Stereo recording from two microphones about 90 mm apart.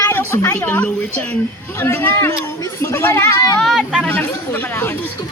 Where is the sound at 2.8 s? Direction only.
30° left (ahead or behind).